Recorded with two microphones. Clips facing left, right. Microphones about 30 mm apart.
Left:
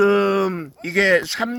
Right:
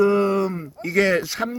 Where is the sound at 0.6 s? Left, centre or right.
Left.